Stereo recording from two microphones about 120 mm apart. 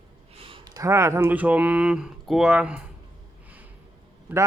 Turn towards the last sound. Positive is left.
turn(degrees=-15)  # may be behind; listen again after turning